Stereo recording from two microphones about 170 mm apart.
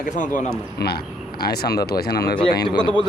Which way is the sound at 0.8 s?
70° left (ahead or behind).